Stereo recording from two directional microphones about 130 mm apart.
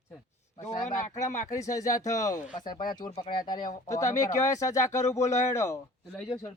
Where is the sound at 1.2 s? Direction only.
25° left (ahead or behind).